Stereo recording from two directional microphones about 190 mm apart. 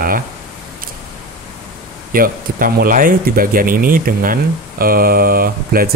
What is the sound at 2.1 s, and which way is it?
Speech, 50° right (ahead or behind).